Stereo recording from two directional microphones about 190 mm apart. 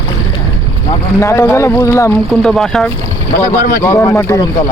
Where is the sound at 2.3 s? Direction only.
Centre (ahead or behind).